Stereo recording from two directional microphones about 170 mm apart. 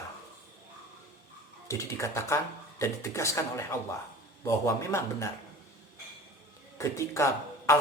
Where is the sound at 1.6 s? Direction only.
15° left (ahead or behind).